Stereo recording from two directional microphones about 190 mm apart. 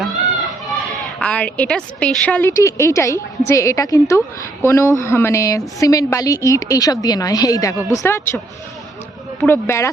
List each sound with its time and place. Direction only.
0.9 s a woman's voice: 5° left (ahead or behind)
9.4 s a woman's voice: 10° left (ahead or behind)